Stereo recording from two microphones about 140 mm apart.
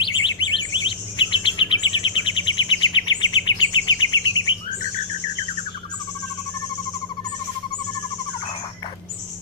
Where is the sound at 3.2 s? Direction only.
35° left (ahead or behind).